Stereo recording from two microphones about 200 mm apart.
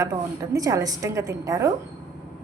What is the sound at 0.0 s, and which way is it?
A woman's voice, 15° right (ahead or behind).